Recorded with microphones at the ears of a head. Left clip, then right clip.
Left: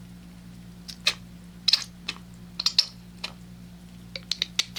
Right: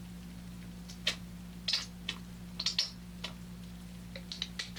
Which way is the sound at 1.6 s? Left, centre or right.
Left.